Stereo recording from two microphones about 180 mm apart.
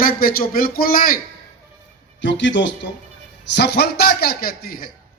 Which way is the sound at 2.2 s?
90° left.